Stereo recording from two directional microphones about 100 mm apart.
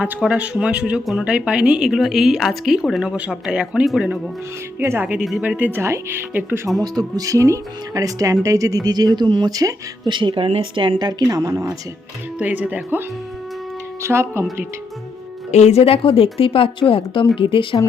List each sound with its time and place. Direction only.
0.0 s speech: 15° right (ahead or behind)
4.8 s speech: 25° right (ahead or behind)
6.8 s speech: 40° right (ahead or behind)
10.1 s speech: 55° right (ahead or behind); by 11.8 s 35° right (ahead or behind)
12.4 s speech: 15° right (ahead or behind)
15.5 s speech: 90° left; by 17.7 s 55° left (ahead or behind)